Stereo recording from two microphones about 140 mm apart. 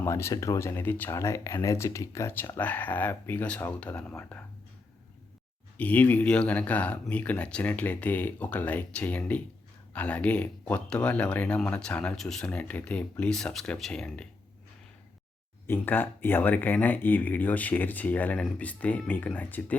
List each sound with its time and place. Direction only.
0.0 s speech: 20° left (ahead or behind)
5.7 s speech: 10° left (ahead or behind)
15.6 s speech: 15° left (ahead or behind)